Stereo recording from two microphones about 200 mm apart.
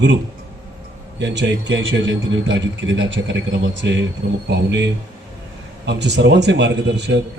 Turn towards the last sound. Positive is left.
turn(degrees=-60)  # may be behind; listen again after turning